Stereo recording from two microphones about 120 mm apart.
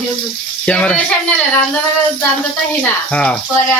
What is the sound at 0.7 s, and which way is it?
Speech, 10° left (ahead or behind).